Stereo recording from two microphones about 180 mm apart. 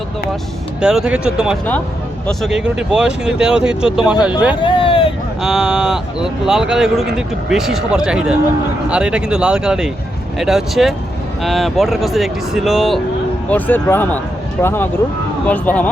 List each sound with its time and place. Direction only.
0.8 s speech: 5° right (ahead or behind)
4.6 s speech: 30° left (ahead or behind)
5.4 s speech: centre (ahead or behind)
13.5 s speech: 10° left (ahead or behind)